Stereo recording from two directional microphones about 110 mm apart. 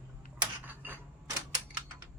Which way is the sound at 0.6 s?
15° right (ahead or behind).